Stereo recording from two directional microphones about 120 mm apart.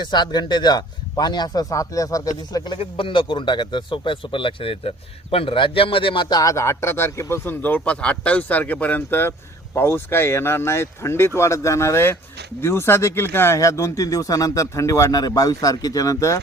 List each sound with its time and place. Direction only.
0.0 s a man's voice: 35° left (ahead or behind)
2.7 s speech: 45° left (ahead or behind)
6.2 s a man's voice: 30° left (ahead or behind)